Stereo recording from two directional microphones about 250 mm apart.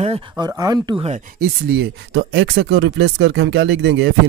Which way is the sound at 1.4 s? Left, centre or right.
Right.